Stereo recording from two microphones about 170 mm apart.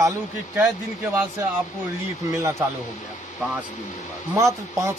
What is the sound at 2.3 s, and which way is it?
Speech, 20° right (ahead or behind).